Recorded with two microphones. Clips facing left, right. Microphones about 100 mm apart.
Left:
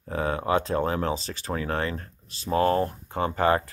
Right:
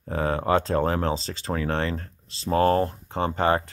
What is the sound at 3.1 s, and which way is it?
Speech, 25° right (ahead or behind).